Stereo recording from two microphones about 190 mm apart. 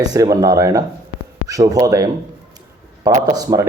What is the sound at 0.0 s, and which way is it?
Speech, 20° right (ahead or behind).